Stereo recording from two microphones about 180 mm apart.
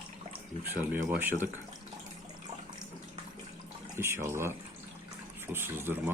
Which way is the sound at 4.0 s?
15° right (ahead or behind).